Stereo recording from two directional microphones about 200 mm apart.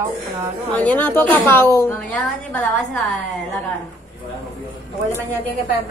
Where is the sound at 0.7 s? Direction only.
10° left (ahead or behind).